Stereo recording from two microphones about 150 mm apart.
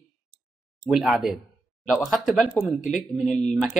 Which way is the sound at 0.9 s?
5° right (ahead or behind).